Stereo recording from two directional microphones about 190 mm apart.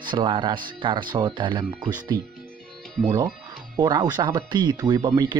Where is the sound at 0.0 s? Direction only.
25° right (ahead or behind).